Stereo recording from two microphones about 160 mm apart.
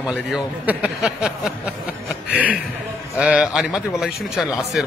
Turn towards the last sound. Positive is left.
turn(degrees=-5)  # may be behind; listen again after turning